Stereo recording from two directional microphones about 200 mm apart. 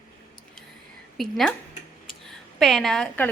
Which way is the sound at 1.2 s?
Centre (ahead or behind).